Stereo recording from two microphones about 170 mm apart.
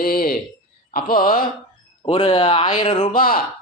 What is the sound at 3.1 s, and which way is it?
Speech, 55° left (ahead or behind).